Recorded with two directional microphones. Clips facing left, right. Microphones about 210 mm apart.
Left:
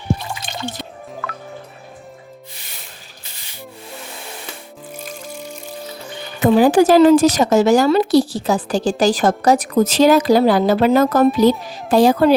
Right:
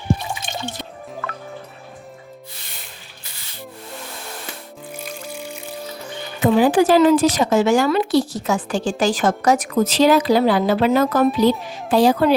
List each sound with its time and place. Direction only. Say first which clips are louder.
1.2 s music: left 1 dB; centre (ahead or behind)
4.9 s music: even; 10° right (ahead or behind)
6.4 s a child's voice: left 3 dB; 45° left (ahead or behind)